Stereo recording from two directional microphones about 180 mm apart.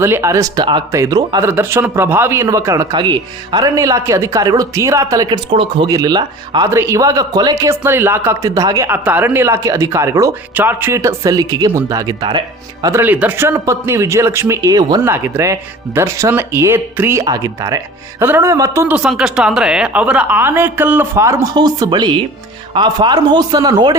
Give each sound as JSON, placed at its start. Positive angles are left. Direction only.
{"t": 0.0, "sound": "a man's voice", "side_deg": -15}